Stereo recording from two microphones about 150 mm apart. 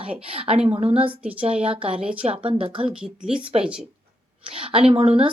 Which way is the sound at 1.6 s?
35° right (ahead or behind).